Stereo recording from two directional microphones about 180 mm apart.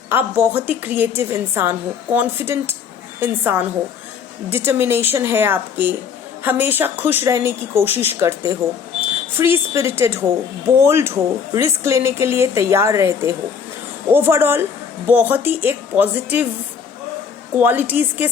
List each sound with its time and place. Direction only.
0.1 s speech: 10° right (ahead or behind)
17.5 s speech: 10° right (ahead or behind)